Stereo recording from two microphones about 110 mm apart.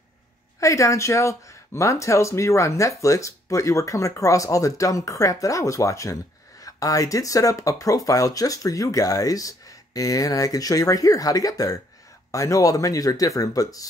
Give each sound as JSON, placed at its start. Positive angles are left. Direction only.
{"t": 0.6, "sound": "speech", "side_deg": 30}